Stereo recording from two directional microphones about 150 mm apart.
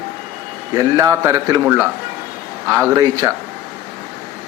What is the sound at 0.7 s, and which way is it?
A man's voice, 20° right (ahead or behind).